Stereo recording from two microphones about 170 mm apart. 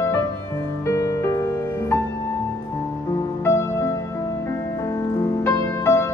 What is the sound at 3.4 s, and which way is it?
Music, 15° left (ahead or behind).